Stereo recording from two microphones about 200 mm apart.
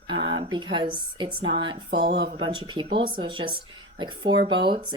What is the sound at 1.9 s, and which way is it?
Speech, 55° right (ahead or behind).